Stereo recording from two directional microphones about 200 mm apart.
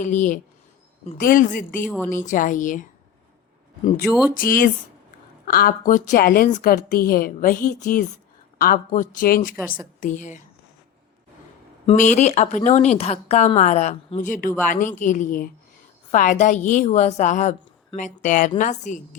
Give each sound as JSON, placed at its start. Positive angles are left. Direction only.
{"t": 0.0, "sound": "a woman's voice", "side_deg": 40}
{"t": 4.4, "sound": "a woman's voice", "side_deg": 45}
{"t": 11.9, "sound": "a woman's voice", "side_deg": 35}